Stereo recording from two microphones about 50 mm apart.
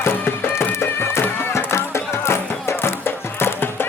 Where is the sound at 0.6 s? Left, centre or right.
Left.